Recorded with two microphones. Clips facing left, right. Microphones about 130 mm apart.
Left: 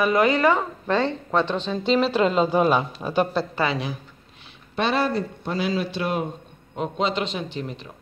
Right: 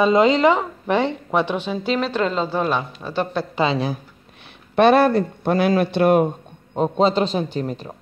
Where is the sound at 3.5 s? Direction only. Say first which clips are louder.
Right 4 dB; 20° right (ahead or behind).